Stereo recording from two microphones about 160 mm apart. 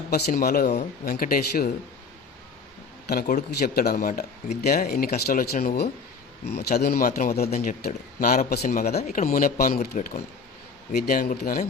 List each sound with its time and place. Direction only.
0.1 s speech: 75° left (ahead or behind)
3.1 s speech: 65° left (ahead or behind); by 7.5 s 80° left
7.5 s speech: 50° left (ahead or behind); by 9.0 s 80° left
9.0 s speech: 50° left (ahead or behind)